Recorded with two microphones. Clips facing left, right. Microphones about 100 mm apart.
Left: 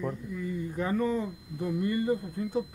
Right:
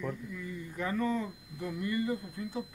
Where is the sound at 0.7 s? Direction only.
30° left (ahead or behind).